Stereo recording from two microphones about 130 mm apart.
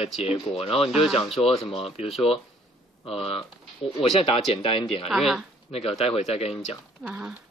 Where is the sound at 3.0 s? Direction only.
45° left (ahead or behind).